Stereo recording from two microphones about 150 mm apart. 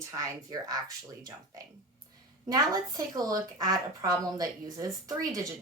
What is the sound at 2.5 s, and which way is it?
A woman's voice, 25° right (ahead or behind).